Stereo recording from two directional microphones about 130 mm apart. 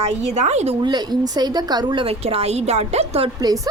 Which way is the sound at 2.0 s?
50° right (ahead or behind).